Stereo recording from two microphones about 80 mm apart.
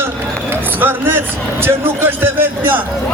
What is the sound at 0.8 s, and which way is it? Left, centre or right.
A man's voice, right.